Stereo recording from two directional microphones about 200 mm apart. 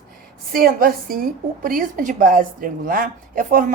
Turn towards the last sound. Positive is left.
turn(degrees=-45)  # may be behind; listen again after turning